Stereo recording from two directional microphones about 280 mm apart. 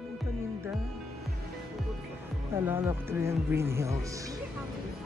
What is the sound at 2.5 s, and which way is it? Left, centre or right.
Speech, centre.